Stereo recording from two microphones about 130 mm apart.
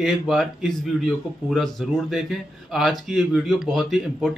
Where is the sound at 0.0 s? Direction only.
Centre (ahead or behind).